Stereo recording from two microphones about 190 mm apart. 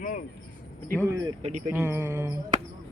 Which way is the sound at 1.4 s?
35° right (ahead or behind).